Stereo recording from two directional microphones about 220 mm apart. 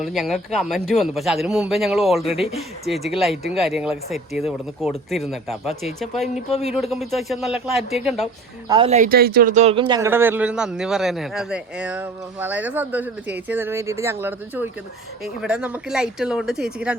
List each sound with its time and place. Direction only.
0.0 s speech: centre (ahead or behind)
6.5 s speech: 30° left (ahead or behind)
6.9 s speech: centre (ahead or behind)
8.6 s speech: 15° right (ahead or behind)
8.9 s speech: 40° right (ahead or behind); by 16.9 s 5° right (ahead or behind)